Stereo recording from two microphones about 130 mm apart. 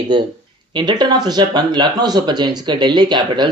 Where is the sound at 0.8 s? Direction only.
35° right (ahead or behind).